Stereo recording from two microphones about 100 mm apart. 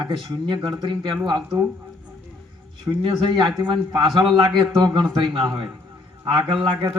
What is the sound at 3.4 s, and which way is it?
A man's voice, 50° right (ahead or behind).